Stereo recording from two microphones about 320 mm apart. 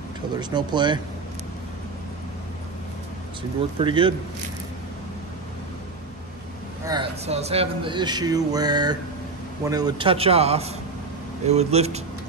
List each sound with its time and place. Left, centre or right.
0.4 s speech: centre
3.7 s speech: centre
6.9 s a man's voice: centre